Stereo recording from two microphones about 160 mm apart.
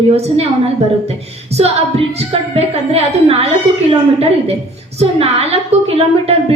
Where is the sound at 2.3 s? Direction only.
40° right (ahead or behind).